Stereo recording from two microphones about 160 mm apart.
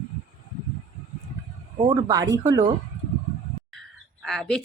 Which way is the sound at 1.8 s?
25° right (ahead or behind).